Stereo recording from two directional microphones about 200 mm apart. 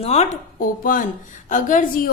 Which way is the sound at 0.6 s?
45° left (ahead or behind).